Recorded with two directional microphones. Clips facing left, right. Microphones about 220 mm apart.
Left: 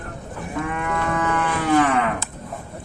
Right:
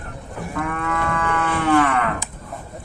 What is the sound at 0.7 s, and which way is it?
Livestock, 20° left (ahead or behind).